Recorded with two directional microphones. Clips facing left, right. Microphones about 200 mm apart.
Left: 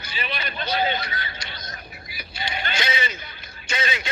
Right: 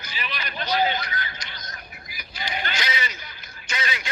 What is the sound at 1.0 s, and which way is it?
Speech, 25° left (ahead or behind).